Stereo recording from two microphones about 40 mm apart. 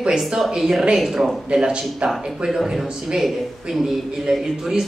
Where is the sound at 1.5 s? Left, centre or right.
Right.